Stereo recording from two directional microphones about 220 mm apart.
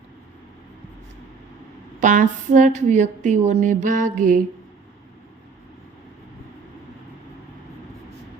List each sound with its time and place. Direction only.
2.0 s speech: 35° right (ahead or behind)